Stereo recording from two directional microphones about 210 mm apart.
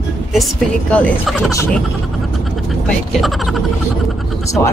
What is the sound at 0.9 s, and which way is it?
Gobble, 5° left (ahead or behind).